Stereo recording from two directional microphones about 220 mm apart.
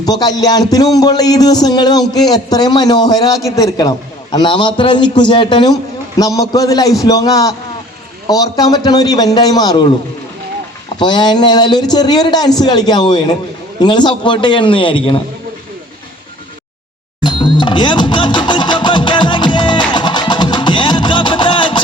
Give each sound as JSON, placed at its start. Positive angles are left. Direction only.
{"t": 0.0, "sound": "a sound", "side_deg": 15}
{"t": 11.0, "sound": "a man's voice", "side_deg": 20}
{"t": 17.2, "sound": "music", "side_deg": 20}